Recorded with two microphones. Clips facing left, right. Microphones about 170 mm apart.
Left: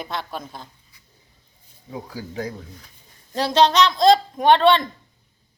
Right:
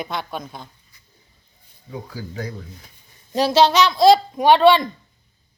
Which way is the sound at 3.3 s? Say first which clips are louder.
Right 2 dB; 10° right (ahead or behind).